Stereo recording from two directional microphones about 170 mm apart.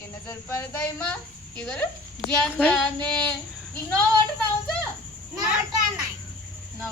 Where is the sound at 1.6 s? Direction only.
5° left (ahead or behind).